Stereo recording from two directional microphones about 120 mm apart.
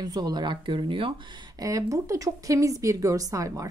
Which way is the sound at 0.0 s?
35° right (ahead or behind).